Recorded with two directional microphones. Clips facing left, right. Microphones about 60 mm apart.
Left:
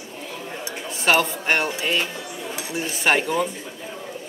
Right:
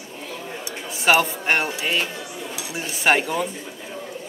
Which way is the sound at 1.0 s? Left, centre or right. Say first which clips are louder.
Right 1 dB; centre.